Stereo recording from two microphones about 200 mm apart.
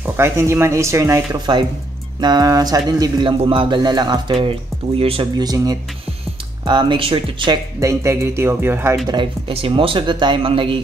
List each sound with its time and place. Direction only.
0.0 s speech: 15° right (ahead or behind)
9.0 s speech: 20° right (ahead or behind)